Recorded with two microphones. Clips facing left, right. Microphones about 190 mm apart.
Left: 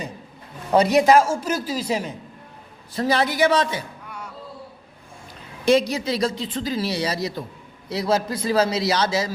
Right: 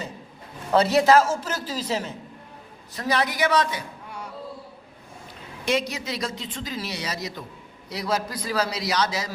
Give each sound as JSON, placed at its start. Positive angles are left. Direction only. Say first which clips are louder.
{"t": 0.7, "sound": "a man's voice", "louder": "left 2 dB", "side_deg": 15}
{"t": 2.9, "sound": "a man's voice", "louder": "left 4 dB", "side_deg": 30}
{"t": 5.6, "sound": "a man's voice", "louder": "left 7 dB", "side_deg": 35}